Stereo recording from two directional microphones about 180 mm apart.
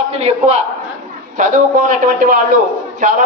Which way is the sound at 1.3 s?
45° right (ahead or behind).